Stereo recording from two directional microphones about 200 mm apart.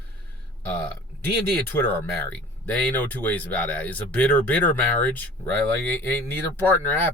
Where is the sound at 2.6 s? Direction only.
10° left (ahead or behind).